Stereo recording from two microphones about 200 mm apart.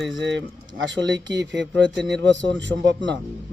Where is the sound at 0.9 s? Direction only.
65° right (ahead or behind).